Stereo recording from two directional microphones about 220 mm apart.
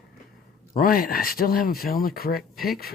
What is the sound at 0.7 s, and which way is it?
Speech, 40° left (ahead or behind).